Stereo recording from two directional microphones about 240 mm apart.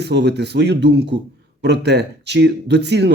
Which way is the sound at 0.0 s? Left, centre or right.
Right.